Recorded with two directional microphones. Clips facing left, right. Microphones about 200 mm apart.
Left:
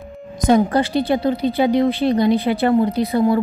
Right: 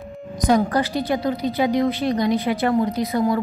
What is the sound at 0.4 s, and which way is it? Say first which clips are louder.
A woman's voice: left 3 dB; 25° left (ahead or behind).